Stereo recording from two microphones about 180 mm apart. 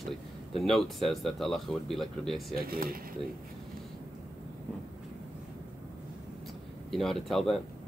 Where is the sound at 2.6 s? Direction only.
55° right (ahead or behind).